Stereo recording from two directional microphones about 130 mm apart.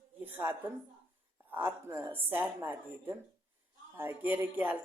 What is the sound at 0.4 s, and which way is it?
Speech, 15° right (ahead or behind).